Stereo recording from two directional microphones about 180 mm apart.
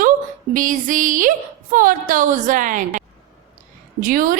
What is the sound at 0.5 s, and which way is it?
A woman's voice, 45° right (ahead or behind).